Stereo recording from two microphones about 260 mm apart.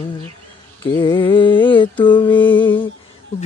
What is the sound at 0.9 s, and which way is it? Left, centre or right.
Music, centre.